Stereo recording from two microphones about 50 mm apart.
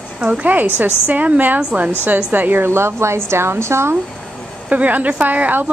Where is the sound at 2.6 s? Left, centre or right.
Right.